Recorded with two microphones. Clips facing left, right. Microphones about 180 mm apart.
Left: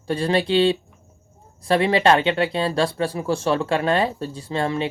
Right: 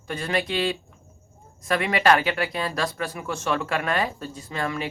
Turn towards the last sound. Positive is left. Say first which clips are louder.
# left 5 dB
turn(degrees=30)  # may be behind; listen again after turning